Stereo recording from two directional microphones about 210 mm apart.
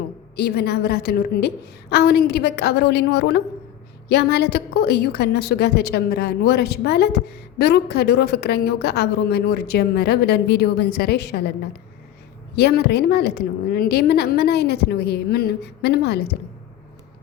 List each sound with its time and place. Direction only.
0.3 s a woman's voice: 50° left (ahead or behind)
12.5 s a woman's voice: 50° left (ahead or behind)